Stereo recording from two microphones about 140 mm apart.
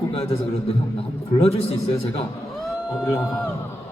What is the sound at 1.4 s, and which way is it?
Speech, 45° left (ahead or behind).